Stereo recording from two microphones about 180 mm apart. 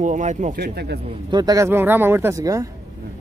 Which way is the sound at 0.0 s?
40° right (ahead or behind).